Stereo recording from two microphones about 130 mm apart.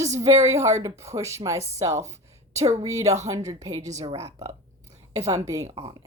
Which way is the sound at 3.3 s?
25° right (ahead or behind).